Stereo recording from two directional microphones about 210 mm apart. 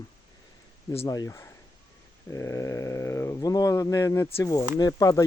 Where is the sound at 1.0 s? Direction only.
15° left (ahead or behind).